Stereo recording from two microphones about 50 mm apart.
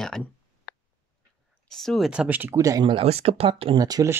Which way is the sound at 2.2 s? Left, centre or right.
Right.